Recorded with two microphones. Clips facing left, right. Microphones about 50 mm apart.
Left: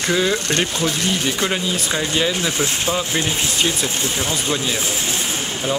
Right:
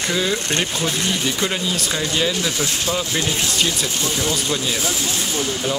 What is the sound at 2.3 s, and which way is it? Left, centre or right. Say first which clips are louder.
Speech: left 1 dB; left.